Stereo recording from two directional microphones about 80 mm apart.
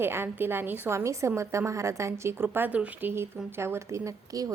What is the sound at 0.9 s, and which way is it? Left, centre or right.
A woman's voice, right.